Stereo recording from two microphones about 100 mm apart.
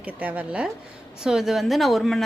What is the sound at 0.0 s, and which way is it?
Speech, 15° right (ahead or behind).